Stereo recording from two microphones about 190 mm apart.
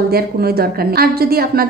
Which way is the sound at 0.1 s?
55° right (ahead or behind).